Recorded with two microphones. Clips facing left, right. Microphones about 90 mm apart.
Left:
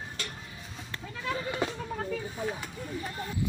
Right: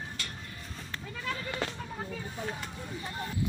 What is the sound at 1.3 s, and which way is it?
Goat, 15° left (ahead or behind).